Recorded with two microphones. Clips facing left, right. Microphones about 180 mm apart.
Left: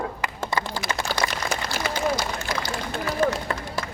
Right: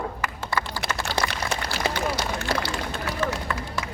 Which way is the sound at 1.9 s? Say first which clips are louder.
Left 2 dB; 65° right (ahead or behind).